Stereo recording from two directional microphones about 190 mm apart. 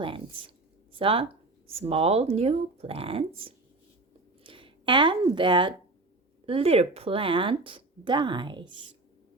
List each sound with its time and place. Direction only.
0.9 s speech: 30° right (ahead or behind)
4.4 s speech: 25° right (ahead or behind)